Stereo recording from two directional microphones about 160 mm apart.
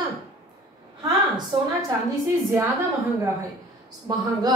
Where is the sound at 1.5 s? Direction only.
30° right (ahead or behind).